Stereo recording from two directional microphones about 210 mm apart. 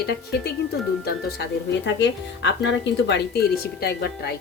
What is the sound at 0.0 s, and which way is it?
A woman's voice, 50° left (ahead or behind).